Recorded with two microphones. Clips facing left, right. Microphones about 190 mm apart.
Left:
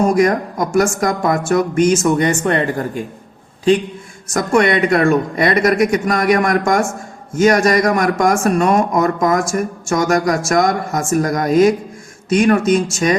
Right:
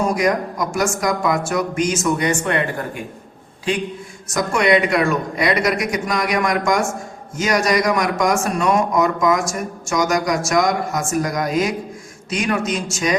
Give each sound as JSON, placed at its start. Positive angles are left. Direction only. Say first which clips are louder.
{"t": 0.1, "sound": "speech", "louder": "left 4 dB", "side_deg": 50}
{"t": 4.4, "sound": "speech", "louder": "left 2 dB", "side_deg": 50}